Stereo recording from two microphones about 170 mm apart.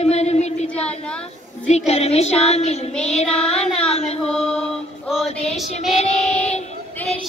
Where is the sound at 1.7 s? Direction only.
40° left (ahead or behind).